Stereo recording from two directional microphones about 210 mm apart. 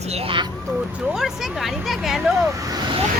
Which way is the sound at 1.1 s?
Centre (ahead or behind).